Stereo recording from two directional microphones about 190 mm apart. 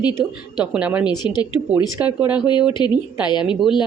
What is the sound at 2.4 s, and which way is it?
Speech, 25° left (ahead or behind).